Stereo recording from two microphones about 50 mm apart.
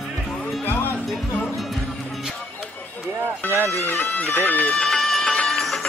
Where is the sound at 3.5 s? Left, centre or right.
Right.